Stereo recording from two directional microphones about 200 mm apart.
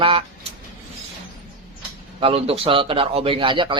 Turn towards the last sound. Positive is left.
turn(degrees=-25)  # may be behind; listen again after turning